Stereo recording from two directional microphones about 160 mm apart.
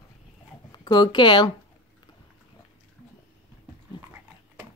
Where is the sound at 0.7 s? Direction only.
25° left (ahead or behind).